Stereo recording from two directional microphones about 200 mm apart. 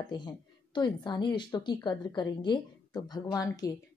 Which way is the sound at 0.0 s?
20° left (ahead or behind).